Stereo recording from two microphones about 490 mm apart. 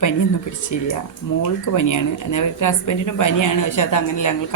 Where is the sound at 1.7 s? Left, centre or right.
Left.